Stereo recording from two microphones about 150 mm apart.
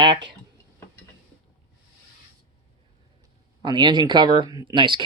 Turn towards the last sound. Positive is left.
turn(degrees=-30)  # may be behind; listen again after turning